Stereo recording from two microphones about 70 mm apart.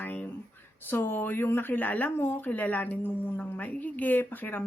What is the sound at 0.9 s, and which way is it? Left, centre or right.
A woman's voice, left.